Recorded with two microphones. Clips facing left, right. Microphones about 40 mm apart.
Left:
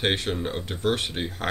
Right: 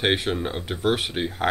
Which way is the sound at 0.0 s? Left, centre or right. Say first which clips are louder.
Right 3 dB; centre.